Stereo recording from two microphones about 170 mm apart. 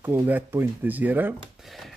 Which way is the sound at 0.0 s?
10° right (ahead or behind).